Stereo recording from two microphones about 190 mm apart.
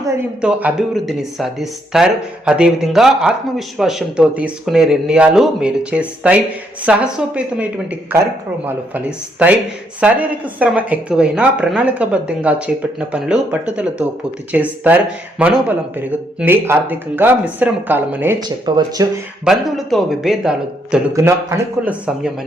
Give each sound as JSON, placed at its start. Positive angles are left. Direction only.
{"t": 0.4, "sound": "speech", "side_deg": -5}
{"t": 18.3, "sound": "speech", "side_deg": -20}
{"t": 19.5, "sound": "speech", "side_deg": 0}
{"t": 21.1, "sound": "speech", "side_deg": -15}